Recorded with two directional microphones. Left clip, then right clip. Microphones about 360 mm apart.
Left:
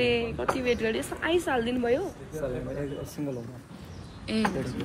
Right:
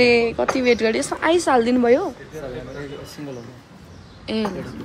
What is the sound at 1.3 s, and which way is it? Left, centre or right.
Speech, right.